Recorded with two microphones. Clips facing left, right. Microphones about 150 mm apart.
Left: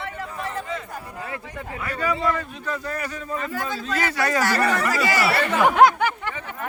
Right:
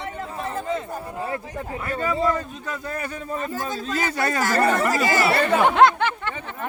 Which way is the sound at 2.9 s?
35° right (ahead or behind).